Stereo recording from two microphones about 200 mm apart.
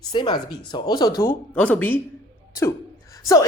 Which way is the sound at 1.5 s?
5° left (ahead or behind).